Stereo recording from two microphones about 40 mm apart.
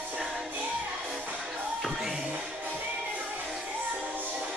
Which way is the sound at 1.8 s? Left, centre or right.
Centre.